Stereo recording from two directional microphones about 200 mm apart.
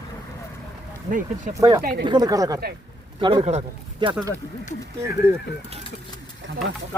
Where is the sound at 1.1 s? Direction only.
40° right (ahead or behind).